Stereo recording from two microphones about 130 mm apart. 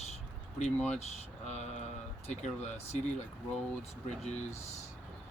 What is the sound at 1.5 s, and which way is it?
Speech, 60° left (ahead or behind).